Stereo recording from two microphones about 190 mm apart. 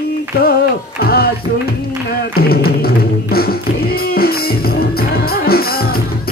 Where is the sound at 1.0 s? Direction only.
55° left (ahead or behind).